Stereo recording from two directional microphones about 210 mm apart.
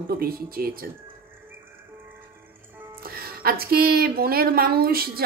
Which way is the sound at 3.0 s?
45° right (ahead or behind).